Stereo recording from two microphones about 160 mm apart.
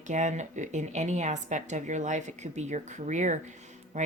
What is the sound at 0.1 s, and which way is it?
Speech, 50° right (ahead or behind).